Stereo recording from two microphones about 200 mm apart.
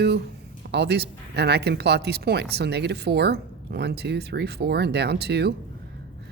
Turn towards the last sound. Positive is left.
turn(degrees=-55)  # may be behind; listen again after turning